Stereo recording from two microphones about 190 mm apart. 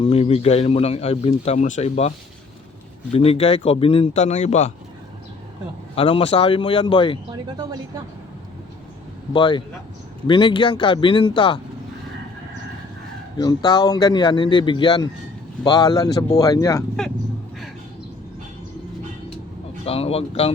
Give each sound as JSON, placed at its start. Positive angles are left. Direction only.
{"t": 0.0, "sound": "speech", "side_deg": 30}
{"t": 6.0, "sound": "a man's voice", "side_deg": 30}
{"t": 7.3, "sound": "speech", "side_deg": -20}
{"t": 9.3, "sound": "a man's voice", "side_deg": 25}
{"t": 13.3, "sound": "a man's voice", "side_deg": 20}
{"t": 19.8, "sound": "speech", "side_deg": 30}